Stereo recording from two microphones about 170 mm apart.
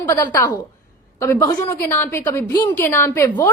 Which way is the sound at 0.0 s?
15° left (ahead or behind).